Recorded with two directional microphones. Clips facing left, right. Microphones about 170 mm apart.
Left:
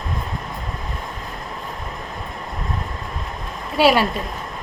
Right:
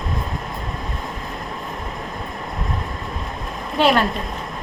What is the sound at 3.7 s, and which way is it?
Speech, 5° left (ahead or behind).